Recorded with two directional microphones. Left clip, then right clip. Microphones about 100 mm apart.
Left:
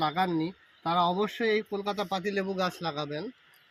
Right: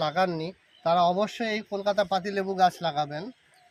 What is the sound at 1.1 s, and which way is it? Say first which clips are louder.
Speech: even; 75° right (ahead or behind).